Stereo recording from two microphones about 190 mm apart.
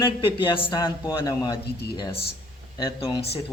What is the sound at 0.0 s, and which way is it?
Speech, 25° left (ahead or behind).